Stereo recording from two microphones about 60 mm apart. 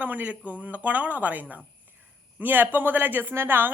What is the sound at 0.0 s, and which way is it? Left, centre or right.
A woman's voice, right.